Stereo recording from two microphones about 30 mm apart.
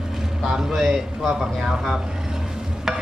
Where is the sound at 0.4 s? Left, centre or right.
Centre.